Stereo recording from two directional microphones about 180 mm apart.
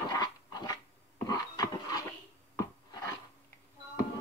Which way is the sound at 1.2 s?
20° left (ahead or behind).